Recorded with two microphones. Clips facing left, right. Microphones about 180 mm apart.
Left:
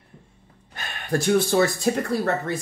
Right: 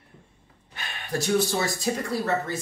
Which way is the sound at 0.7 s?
55° left (ahead or behind).